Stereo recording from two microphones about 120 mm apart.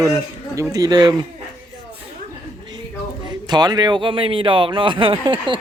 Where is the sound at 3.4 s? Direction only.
35° right (ahead or behind).